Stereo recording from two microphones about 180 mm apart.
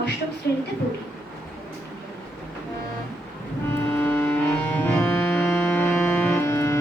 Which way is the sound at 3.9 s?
10° left (ahead or behind).